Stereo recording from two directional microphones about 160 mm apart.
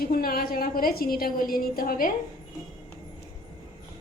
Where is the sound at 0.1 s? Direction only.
65° left (ahead or behind).